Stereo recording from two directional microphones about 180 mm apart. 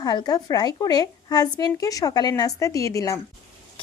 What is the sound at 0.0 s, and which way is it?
A woman's voice, 20° left (ahead or behind).